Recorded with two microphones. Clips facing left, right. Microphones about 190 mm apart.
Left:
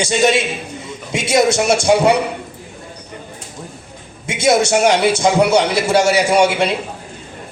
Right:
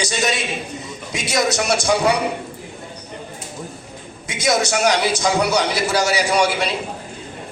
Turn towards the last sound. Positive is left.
turn(degrees=25)  # may be behind; listen again after turning